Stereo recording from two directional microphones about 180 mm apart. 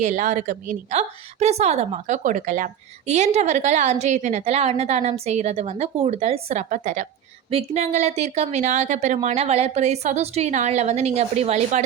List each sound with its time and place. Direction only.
0.0 s a woman's voice: 40° right (ahead or behind)